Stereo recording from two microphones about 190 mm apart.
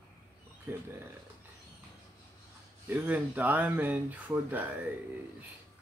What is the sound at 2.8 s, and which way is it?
Speech, 10° right (ahead or behind).